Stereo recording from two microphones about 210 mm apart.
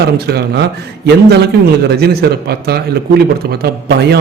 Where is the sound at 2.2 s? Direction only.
50° right (ahead or behind).